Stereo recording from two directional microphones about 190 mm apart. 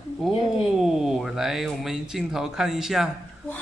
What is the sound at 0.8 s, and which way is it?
Speech, centre (ahead or behind).